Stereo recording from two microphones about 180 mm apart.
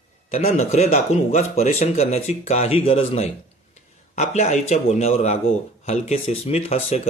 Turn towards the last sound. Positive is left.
turn(degrees=35)  # may be behind; listen again after turning